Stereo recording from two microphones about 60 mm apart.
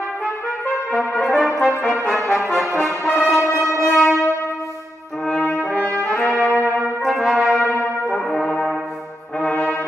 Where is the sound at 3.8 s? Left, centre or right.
Centre.